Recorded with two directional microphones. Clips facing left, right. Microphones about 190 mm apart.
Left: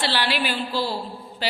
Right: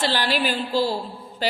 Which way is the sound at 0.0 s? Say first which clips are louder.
Right 2 dB; 45° right (ahead or behind).